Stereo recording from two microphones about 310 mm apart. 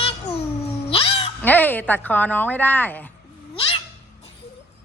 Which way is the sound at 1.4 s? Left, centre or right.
Centre.